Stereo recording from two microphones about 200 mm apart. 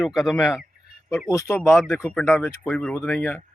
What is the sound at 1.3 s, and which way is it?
Speech, 15° left (ahead or behind).